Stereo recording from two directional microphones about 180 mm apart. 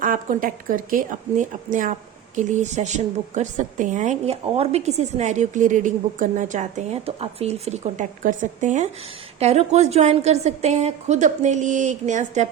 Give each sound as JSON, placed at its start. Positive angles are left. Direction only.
{"t": 0.0, "sound": "a woman's voice", "side_deg": -50}